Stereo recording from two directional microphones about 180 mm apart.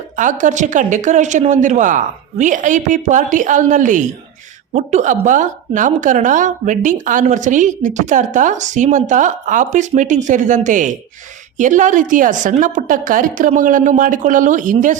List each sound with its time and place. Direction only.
0.2 s a woman's voice: 45° right (ahead or behind)